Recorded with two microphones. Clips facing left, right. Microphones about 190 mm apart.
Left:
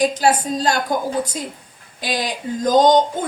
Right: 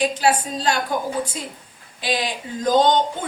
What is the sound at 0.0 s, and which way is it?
Speech, 40° left (ahead or behind).